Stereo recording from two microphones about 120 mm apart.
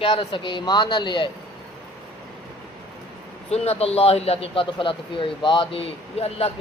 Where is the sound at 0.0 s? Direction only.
45° left (ahead or behind).